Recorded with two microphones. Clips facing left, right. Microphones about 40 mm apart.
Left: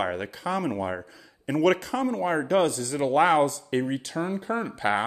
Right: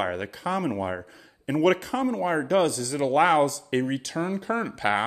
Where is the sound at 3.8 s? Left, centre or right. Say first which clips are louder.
Right 1 dB; centre.